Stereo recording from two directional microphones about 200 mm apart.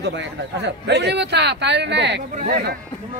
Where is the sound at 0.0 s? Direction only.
60° right (ahead or behind).